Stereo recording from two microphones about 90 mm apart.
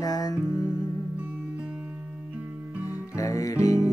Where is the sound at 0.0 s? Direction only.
45° left (ahead or behind).